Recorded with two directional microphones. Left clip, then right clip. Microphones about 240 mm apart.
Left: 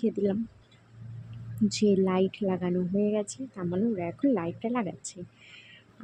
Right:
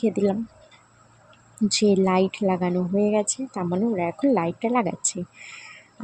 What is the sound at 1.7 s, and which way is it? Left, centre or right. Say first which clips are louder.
Speech: right 6 dB; right.